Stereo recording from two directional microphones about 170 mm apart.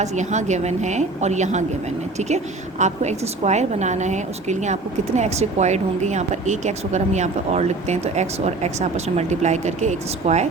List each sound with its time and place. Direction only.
0.0 s a woman's voice: 45° right (ahead or behind)